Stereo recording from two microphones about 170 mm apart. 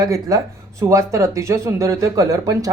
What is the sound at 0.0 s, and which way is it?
Speech, 20° right (ahead or behind).